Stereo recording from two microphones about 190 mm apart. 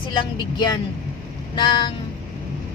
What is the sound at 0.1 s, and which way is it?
Speech, 25° left (ahead or behind).